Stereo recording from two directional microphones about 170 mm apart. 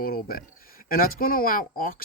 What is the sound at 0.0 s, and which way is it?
Speech, 60° left (ahead or behind).